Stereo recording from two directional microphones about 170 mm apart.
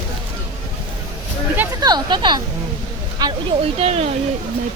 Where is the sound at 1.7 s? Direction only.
25° right (ahead or behind).